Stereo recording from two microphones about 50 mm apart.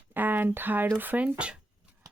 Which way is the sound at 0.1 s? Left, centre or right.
Right.